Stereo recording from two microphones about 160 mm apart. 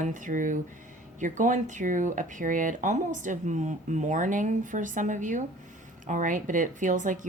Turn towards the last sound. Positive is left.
turn(degrees=-55)  # may be behind; listen again after turning